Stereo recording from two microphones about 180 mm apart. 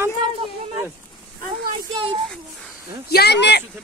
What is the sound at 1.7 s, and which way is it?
Speech, 30° right (ahead or behind).